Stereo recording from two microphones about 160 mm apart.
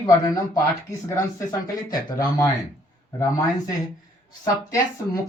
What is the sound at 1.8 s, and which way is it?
Speech, 25° left (ahead or behind).